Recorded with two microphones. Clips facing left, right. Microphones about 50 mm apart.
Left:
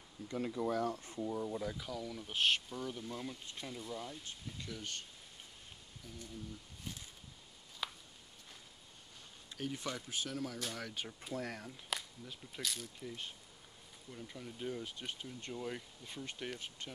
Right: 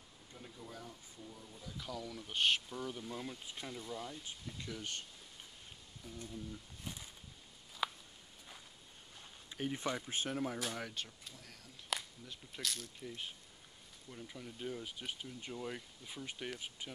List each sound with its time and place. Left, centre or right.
0.3 s speech: left
1.8 s speech: centre
4.2 s speech: centre
6.0 s speech: centre
7.8 s a sound: centre
9.5 s speech: right
10.6 s speech: centre
11.3 s speech: left
11.9 s speech: centre